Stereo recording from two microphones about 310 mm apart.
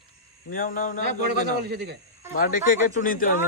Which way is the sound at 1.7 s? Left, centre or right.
Right.